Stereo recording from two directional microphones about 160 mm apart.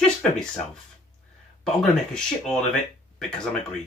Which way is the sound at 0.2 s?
5° left (ahead or behind).